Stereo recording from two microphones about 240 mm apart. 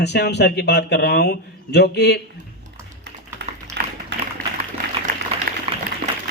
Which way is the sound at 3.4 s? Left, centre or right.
Right.